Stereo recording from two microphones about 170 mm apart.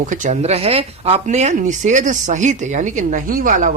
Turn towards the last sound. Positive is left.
turn(degrees=-50)  # may be behind; listen again after turning